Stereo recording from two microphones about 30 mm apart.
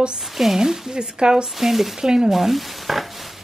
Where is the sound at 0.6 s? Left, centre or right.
Centre.